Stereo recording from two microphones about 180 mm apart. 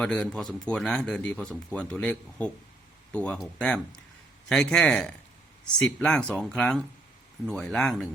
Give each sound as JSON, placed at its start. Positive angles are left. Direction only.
{"t": 0.0, "sound": "speech", "side_deg": 5}